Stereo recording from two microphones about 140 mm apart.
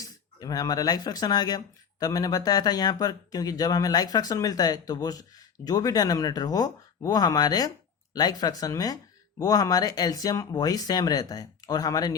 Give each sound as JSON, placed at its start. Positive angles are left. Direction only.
{"t": 0.0, "sound": "speech", "side_deg": 25}